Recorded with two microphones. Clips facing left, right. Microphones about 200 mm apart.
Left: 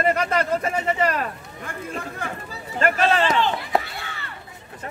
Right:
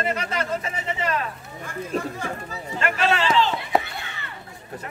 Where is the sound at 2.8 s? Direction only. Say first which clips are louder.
Left 3 dB; 40° left (ahead or behind).